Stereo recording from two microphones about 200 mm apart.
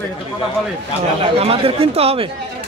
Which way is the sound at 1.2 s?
30° right (ahead or behind).